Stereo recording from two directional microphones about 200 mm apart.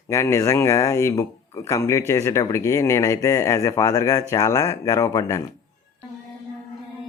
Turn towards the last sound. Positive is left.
turn(degrees=15)  # may be behind; listen again after turning